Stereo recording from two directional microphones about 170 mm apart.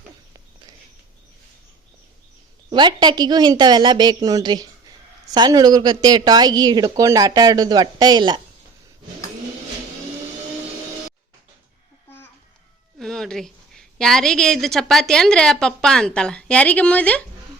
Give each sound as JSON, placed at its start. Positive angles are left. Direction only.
{"t": 2.6, "sound": "speech", "side_deg": -25}
{"t": 13.0, "sound": "a woman's voice", "side_deg": 5}